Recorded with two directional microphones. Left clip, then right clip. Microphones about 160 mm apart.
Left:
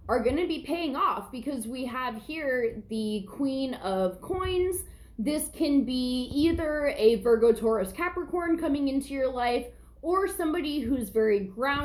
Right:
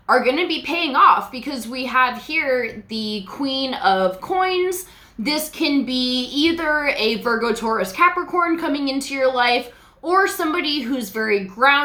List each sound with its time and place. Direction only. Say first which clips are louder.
0.2 s a woman's voice: right 8 dB; 15° right (ahead or behind)